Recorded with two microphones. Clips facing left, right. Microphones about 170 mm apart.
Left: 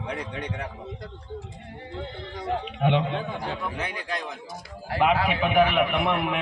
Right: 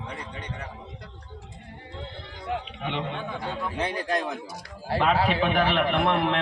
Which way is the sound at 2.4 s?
55° left (ahead or behind).